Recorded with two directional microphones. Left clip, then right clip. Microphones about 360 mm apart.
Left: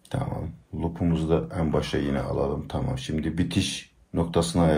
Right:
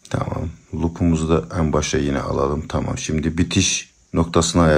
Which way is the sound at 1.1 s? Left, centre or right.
Centre.